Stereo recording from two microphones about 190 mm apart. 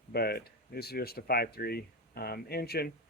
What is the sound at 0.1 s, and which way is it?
Speech, 55° left (ahead or behind).